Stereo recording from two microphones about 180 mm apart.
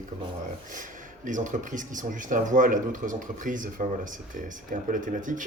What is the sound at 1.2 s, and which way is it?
Speech, 45° right (ahead or behind).